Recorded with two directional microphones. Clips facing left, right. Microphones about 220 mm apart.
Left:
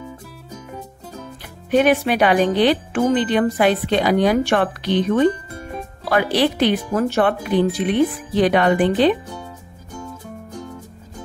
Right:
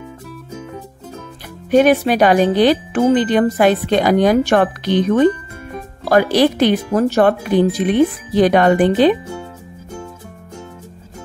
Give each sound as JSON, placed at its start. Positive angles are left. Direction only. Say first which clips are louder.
{"t": 1.7, "sound": "speech", "louder": "right 4 dB", "side_deg": -40}
{"t": 6.0, "sound": "speech", "louder": "right 5 dB", "side_deg": -45}